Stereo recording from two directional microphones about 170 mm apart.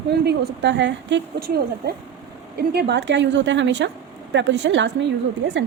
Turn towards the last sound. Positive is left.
turn(degrees=-90)